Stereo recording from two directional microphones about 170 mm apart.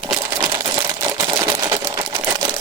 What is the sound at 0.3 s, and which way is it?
Camera, 20° right (ahead or behind).